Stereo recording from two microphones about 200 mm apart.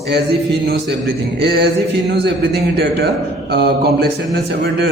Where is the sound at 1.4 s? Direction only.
55° right (ahead or behind).